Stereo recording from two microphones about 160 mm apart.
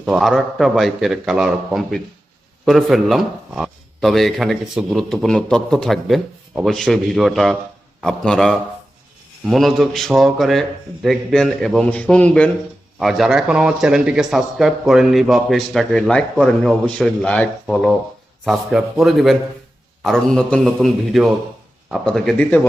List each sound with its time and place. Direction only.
0.0 s a man's voice: centre (ahead or behind)